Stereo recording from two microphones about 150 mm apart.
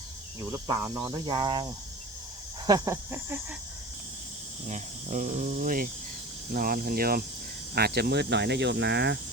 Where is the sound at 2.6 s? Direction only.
25° right (ahead or behind).